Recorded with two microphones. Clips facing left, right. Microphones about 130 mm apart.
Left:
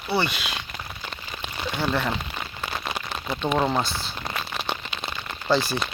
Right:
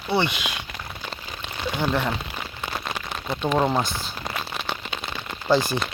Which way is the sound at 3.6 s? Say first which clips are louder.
Right 2 dB; 5° right (ahead or behind).